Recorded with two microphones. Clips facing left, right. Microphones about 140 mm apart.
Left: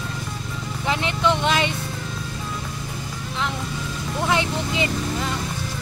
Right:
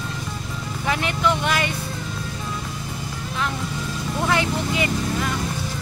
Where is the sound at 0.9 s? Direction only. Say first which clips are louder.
Even; 25° left (ahead or behind).